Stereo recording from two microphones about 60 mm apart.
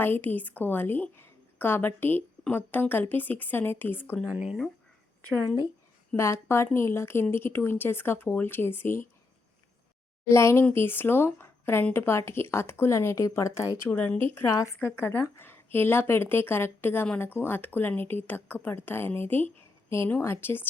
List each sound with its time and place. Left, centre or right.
0.0 s a woman's voice: left
4.3 s speech: right
6.1 s speech: left
10.2 s speech: left
10.8 s speech: left
13.9 s speech: left
14.8 s speech: left